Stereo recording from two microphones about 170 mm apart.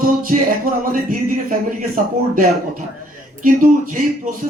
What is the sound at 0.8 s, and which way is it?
Speech, 55° right (ahead or behind).